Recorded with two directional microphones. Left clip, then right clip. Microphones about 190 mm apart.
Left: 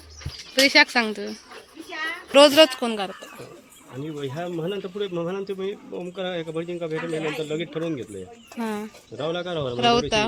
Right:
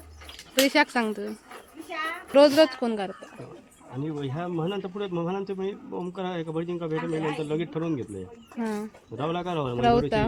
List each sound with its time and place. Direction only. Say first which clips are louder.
0.5 s speech: left 5 dB; 5° right (ahead or behind)
1.9 s a sound: left 1 dB; 45° right (ahead or behind)
2.3 s speech: left 4 dB; 5° right (ahead or behind)
4.0 s speech: left 2 dB; 65° right (ahead or behind)
8.5 s speech: left 2 dB; 5° right (ahead or behind)
9.1 s speech: left 2 dB; 60° right (ahead or behind)
9.8 s speech: left 2 dB; 10° right (ahead or behind)